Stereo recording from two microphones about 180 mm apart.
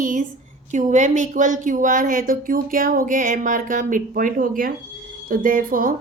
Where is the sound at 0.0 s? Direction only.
45° right (ahead or behind).